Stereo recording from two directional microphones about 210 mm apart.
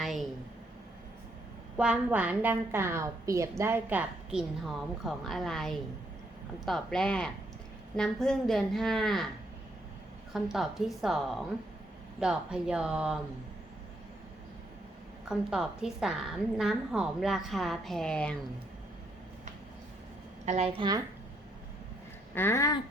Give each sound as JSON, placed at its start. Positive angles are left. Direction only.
{"t": 0.0, "sound": "a sound", "side_deg": 0}
{"t": 1.7, "sound": "a woman's voice", "side_deg": -5}
{"t": 10.3, "sound": "a woman's voice", "side_deg": 0}
{"t": 15.2, "sound": "a woman's voice", "side_deg": -5}
{"t": 20.4, "sound": "a woman's voice", "side_deg": -30}
{"t": 22.4, "sound": "speech", "side_deg": 10}